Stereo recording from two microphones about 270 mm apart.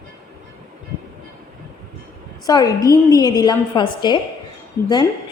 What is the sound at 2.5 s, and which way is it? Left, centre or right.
A woman's voice, centre.